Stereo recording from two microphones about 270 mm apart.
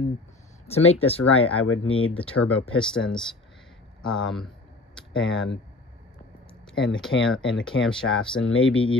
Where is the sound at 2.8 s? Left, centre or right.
Centre.